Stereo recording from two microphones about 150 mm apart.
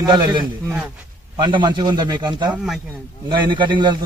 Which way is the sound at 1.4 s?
30° right (ahead or behind).